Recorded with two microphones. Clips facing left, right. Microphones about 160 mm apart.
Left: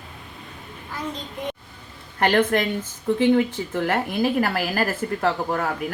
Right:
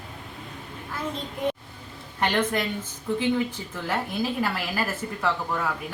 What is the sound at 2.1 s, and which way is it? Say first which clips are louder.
Speech: left 5 dB; 60° left (ahead or behind).